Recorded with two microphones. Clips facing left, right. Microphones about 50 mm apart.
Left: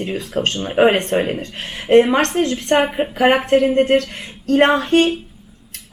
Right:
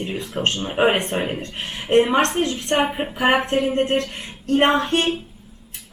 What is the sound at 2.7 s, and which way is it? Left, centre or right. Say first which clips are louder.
Speech: left 4 dB; centre.